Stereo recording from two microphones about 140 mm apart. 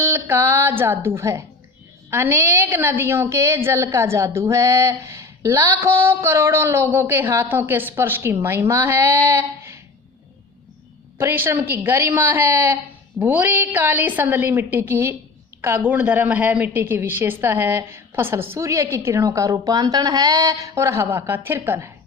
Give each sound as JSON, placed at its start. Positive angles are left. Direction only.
{"t": 0.0, "sound": "a woman's voice", "side_deg": -15}
{"t": 11.2, "sound": "a woman's voice", "side_deg": -15}